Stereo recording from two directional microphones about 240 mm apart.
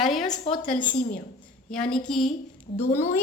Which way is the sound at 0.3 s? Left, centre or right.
Left.